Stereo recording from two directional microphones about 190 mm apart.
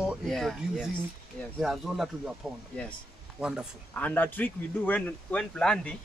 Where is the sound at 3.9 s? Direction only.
10° left (ahead or behind).